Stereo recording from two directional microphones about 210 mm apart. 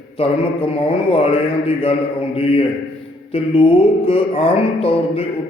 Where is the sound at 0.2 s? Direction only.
25° left (ahead or behind).